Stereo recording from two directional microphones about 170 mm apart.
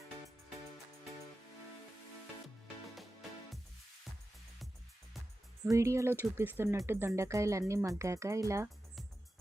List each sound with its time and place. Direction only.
2.9 s music: centre (ahead or behind)
5.7 s speech: 15° right (ahead or behind)